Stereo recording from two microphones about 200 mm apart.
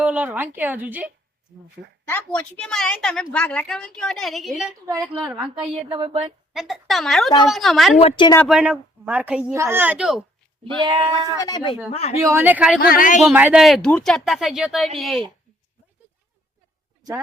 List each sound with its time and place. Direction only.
0.0 s speech: 5° right (ahead or behind)
2.0 s a woman's voice: 10° left (ahead or behind)
4.9 s speech: 15° right (ahead or behind)
6.5 s a woman's voice: centre (ahead or behind)
8.0 s speech: 25° left (ahead or behind)
8.4 s speech: centre (ahead or behind)
10.6 s speech: 25° right (ahead or behind)
11.3 s a woman's voice: 20° left (ahead or behind)
12.2 s speech: 10° right (ahead or behind)
12.8 s speech: 45° left (ahead or behind)
13.1 s a woman's voice: 5° right (ahead or behind)